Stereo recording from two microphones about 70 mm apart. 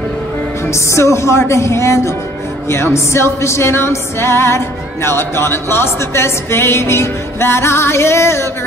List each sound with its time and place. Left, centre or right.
0.7 s speech: left
2.7 s music: left